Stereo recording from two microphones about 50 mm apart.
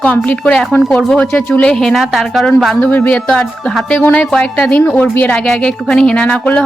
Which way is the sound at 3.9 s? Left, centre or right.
Left.